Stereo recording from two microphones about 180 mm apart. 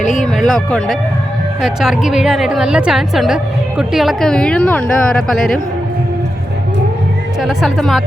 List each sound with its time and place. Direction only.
0.0 s speech: 40° left (ahead or behind)
0.3 s a woman's voice: centre (ahead or behind)
7.4 s a woman's voice: centre (ahead or behind)